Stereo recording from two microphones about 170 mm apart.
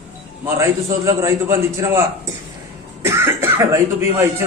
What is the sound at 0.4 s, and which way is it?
A man's voice, 15° right (ahead or behind).